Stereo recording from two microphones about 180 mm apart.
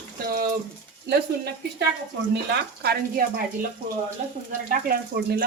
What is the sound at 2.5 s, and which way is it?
Speech, 65° right (ahead or behind).